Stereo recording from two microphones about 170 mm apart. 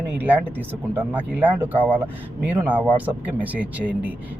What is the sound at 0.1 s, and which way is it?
Speech, 10° right (ahead or behind).